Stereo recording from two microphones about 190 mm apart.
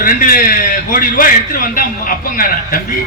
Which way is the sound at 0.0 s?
45° left (ahead or behind).